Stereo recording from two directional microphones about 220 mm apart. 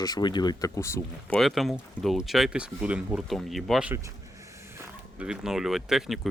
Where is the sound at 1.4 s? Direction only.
Centre (ahead or behind).